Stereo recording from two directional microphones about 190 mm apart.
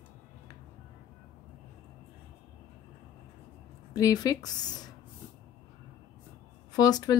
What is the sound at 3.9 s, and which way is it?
Speech, 20° left (ahead or behind).